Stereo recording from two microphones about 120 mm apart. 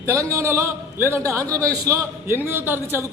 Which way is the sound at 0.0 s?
25° right (ahead or behind).